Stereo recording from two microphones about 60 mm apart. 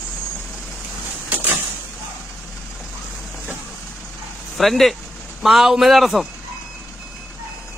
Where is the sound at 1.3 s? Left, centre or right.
Right.